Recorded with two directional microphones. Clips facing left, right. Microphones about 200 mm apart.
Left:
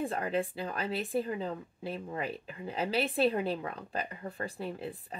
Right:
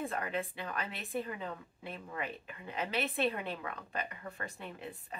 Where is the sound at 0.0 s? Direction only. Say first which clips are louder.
Left 5 dB; 30° left (ahead or behind).